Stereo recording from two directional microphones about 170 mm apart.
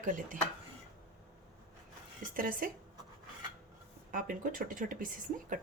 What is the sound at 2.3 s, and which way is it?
Speech, 55° right (ahead or behind).